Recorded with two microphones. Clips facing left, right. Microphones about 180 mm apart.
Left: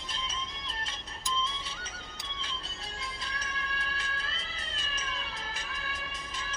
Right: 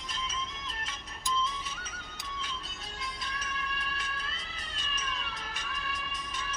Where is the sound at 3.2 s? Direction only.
30° left (ahead or behind).